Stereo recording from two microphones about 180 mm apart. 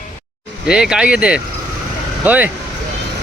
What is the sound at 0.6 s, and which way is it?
Speech, 5° right (ahead or behind).